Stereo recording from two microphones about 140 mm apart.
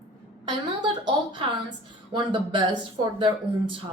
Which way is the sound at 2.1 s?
35° right (ahead or behind).